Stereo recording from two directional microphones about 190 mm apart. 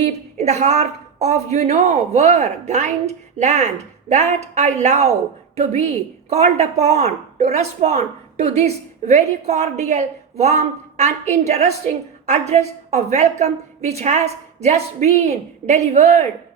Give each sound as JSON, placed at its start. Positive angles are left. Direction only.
{"t": 0.3, "sound": "speech", "side_deg": -35}
{"t": 6.3, "sound": "speech", "side_deg": -35}